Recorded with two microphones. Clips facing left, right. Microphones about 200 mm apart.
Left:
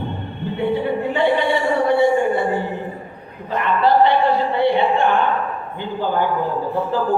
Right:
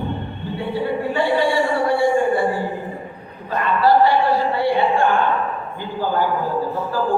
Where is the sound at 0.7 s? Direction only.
20° left (ahead or behind).